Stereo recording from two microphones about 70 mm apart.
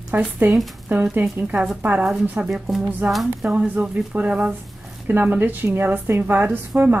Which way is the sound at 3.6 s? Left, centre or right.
Right.